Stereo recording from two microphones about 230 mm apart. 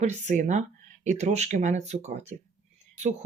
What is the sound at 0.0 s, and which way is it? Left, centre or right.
Speech, right.